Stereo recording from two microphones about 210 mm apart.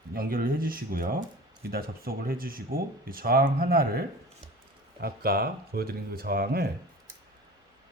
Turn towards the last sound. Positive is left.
turn(degrees=-45)  # may be behind; listen again after turning